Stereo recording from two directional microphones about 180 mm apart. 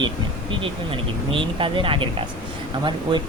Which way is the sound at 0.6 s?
30° right (ahead or behind).